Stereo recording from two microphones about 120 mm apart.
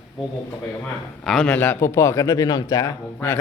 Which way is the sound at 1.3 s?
Centre (ahead or behind).